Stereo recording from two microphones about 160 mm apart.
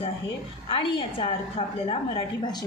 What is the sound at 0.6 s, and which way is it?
A woman's voice, 35° left (ahead or behind).